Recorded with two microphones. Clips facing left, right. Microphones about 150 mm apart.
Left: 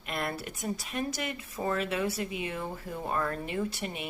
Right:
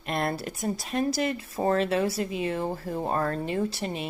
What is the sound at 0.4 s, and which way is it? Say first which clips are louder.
Speech: right 5 dB; 35° right (ahead or behind).